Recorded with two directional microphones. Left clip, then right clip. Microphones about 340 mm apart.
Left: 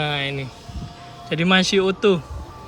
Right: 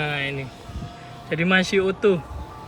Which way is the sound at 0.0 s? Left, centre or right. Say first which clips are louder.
Left 2 dB; left.